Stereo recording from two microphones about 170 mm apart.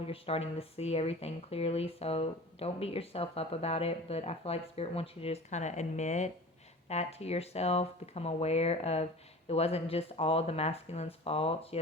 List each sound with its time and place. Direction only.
0.1 s speech: 35° left (ahead or behind)